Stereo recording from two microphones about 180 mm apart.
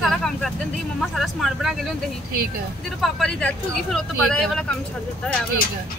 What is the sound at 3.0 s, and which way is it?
Speech, centre (ahead or behind).